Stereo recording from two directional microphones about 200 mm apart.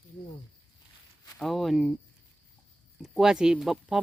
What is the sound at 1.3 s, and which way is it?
Speech, centre (ahead or behind).